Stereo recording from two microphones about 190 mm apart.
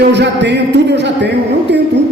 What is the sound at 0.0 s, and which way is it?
A man's voice, 65° right (ahead or behind).